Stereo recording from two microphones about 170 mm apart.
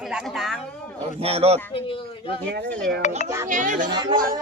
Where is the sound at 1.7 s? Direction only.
30° left (ahead or behind).